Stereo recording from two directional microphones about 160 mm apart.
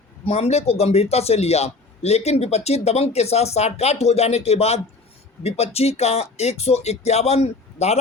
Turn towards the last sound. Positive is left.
turn(degrees=40)  # may be behind; listen again after turning